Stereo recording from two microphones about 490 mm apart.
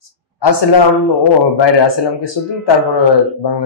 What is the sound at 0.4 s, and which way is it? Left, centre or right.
A man's voice, left.